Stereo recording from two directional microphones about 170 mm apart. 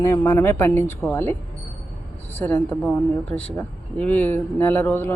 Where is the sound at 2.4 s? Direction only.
10° left (ahead or behind).